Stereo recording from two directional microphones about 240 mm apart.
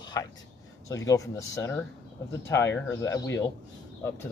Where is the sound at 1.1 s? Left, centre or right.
Centre.